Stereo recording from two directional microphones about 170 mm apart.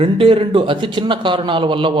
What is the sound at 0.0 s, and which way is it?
A man's voice, 35° right (ahead or behind).